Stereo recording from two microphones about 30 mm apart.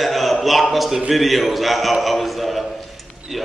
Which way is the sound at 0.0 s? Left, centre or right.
Centre.